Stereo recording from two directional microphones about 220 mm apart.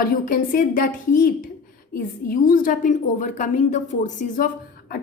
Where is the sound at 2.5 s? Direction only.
35° left (ahead or behind).